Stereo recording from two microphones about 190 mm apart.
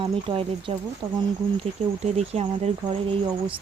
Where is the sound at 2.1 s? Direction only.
35° right (ahead or behind).